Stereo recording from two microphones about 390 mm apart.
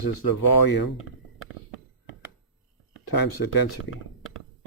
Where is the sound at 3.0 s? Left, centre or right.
Left.